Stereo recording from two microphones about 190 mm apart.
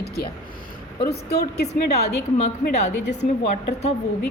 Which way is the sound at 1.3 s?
60° left (ahead or behind).